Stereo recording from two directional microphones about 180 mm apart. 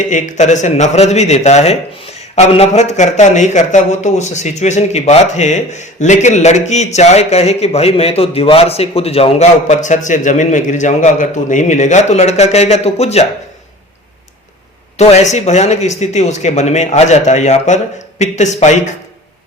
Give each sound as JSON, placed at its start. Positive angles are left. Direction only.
{"t": 0.1, "sound": "speech", "side_deg": 45}
{"t": 14.9, "sound": "speech", "side_deg": 40}